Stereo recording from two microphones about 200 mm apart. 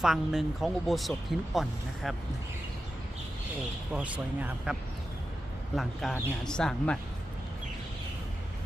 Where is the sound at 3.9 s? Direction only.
5° right (ahead or behind).